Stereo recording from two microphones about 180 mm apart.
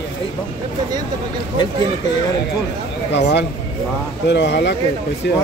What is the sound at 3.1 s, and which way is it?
Speech, 75° left (ahead or behind).